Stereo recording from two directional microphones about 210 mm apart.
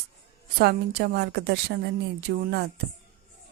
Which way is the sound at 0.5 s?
50° right (ahead or behind).